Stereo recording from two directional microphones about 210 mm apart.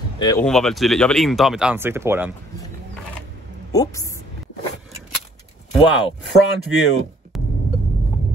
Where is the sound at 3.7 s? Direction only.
15° left (ahead or behind).